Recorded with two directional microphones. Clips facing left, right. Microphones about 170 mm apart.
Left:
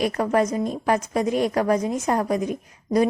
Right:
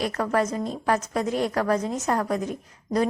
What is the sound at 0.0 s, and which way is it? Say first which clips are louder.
A woman's voice: left 3 dB; 15° left (ahead or behind).